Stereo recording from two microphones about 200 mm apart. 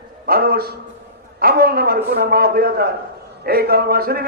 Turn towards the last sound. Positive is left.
turn(degrees=-50)  # may be behind; listen again after turning